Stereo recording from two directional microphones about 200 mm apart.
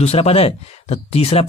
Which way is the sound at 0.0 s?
30° left (ahead or behind).